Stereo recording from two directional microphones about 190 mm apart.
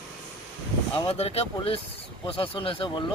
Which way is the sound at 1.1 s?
35° left (ahead or behind).